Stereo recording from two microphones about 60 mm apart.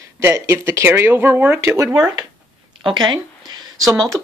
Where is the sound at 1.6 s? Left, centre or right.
Right.